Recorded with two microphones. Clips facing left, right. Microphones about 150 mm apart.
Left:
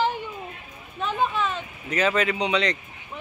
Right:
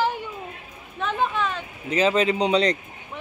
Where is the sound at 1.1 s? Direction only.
10° left (ahead or behind).